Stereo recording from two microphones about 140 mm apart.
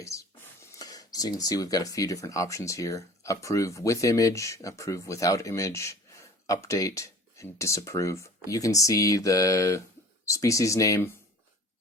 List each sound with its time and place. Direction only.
0.0 s speech: 20° left (ahead or behind)